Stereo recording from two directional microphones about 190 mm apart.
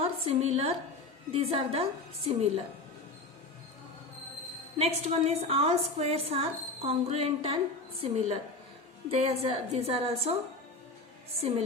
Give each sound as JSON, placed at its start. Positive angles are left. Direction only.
{"t": 0.0, "sound": "a woman's voice", "side_deg": -35}
{"t": 4.8, "sound": "a woman's voice", "side_deg": -35}
{"t": 11.3, "sound": "a woman's voice", "side_deg": -35}